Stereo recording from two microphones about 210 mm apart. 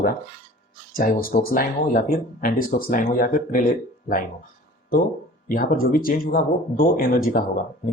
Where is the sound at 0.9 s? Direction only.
40° left (ahead or behind).